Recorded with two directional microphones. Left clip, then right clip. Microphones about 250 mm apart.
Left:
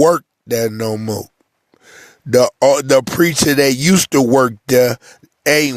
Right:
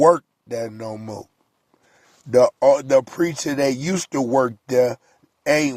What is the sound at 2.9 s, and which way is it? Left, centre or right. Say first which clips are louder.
Speech: left 5 dB; left.